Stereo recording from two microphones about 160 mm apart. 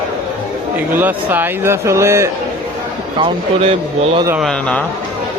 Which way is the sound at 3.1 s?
35° right (ahead or behind).